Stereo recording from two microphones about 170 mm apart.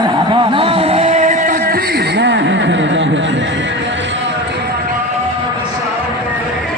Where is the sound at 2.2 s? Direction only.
90° right.